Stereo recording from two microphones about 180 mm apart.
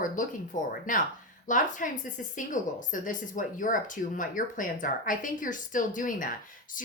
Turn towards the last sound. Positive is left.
turn(degrees=45)  # may be behind; listen again after turning